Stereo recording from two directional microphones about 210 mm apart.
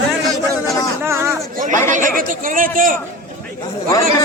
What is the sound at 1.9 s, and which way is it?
Speech, 40° right (ahead or behind).